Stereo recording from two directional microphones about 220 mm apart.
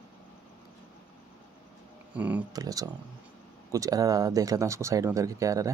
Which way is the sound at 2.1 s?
5° right (ahead or behind).